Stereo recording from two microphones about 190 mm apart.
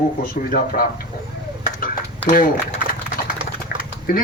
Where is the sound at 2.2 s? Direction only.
45° left (ahead or behind).